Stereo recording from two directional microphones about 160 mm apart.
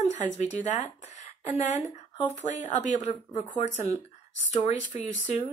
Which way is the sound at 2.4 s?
50° left (ahead or behind).